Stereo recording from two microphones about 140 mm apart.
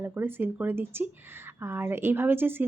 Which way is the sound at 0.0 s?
15° right (ahead or behind).